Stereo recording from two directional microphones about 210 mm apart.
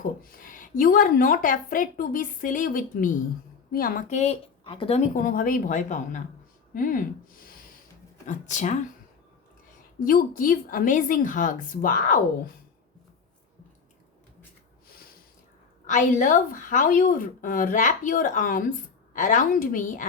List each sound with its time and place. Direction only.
0.2 s a woman's voice: 40° left (ahead or behind); by 5.0 s 25° left (ahead or behind)
5.1 s a woman's voice: 40° left (ahead or behind)
10.0 s a woman's voice: 40° left (ahead or behind)
15.9 s a woman's voice: 35° left (ahead or behind)